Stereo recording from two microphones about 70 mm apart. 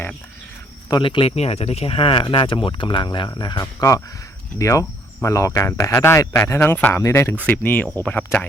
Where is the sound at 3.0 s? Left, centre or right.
Left.